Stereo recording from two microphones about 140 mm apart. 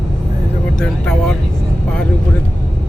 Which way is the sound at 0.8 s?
5° left (ahead or behind).